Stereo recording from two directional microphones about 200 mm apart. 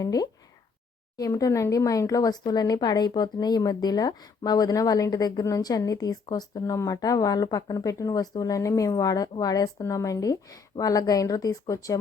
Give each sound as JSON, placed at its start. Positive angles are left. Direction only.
{"t": 0.0, "sound": "speech", "side_deg": 20}